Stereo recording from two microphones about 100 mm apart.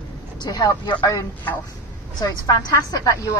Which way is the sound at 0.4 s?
40° left (ahead or behind).